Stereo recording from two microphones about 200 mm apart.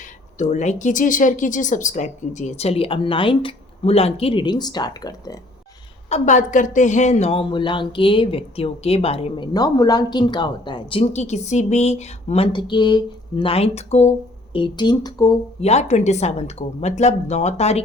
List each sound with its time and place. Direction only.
0.0 s speech: 35° left (ahead or behind); by 5.4 s 20° left (ahead or behind)
6.1 s a woman's voice: 35° left (ahead or behind)
15.6 s speech: 35° left (ahead or behind)